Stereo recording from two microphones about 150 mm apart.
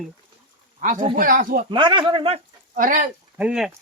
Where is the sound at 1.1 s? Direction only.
70° right (ahead or behind).